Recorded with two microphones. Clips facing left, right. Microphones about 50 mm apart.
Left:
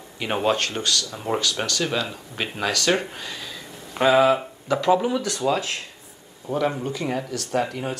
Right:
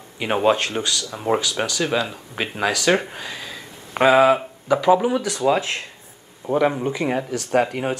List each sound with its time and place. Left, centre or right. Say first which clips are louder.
0.2 s speech: right 4 dB; centre
5.5 s speech: right 5 dB; right
6.4 s speech: right 5 dB; centre